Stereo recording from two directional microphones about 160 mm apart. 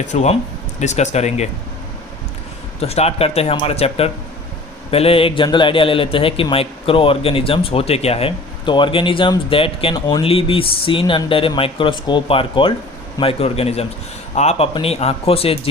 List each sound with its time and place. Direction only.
0.1 s speech: 45° left (ahead or behind)
2.8 s a man's voice: 40° left (ahead or behind)